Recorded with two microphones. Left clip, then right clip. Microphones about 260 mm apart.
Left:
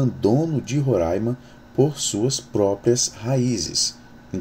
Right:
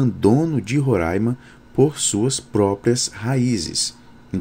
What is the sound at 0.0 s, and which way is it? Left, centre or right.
Speech, right.